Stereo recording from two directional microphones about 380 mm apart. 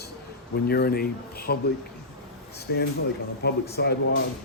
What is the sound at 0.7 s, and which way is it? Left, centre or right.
Speech, left.